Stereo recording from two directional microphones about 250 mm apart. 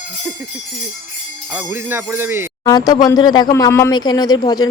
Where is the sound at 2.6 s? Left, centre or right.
Centre.